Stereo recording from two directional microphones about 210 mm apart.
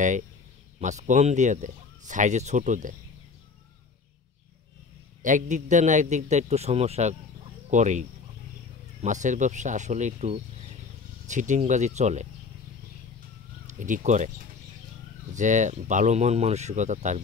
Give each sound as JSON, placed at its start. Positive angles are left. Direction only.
{"t": 0.7, "sound": "speech", "side_deg": -35}
{"t": 5.2, "sound": "speech", "side_deg": -35}
{"t": 13.7, "sound": "speech", "side_deg": -35}
{"t": 15.3, "sound": "speech", "side_deg": -35}